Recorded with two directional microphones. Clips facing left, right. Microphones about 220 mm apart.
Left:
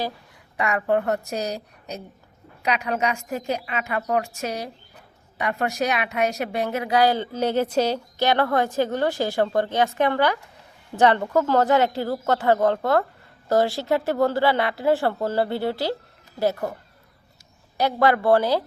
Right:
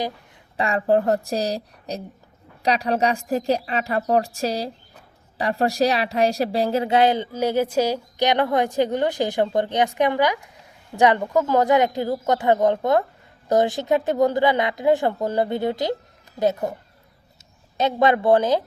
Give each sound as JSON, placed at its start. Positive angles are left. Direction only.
{"t": 0.5, "sound": "a woman's voice", "side_deg": -30}
{"t": 17.7, "sound": "a woman's voice", "side_deg": -20}